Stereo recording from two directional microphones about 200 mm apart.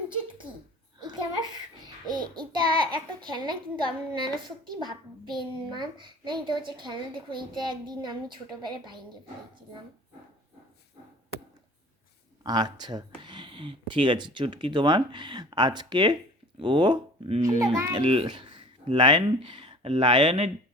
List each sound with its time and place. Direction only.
0.9 s a sound: 20° right (ahead or behind)
2.0 s a child's voice: 20° right (ahead or behind)
12.4 s a child's voice: 20° right (ahead or behind)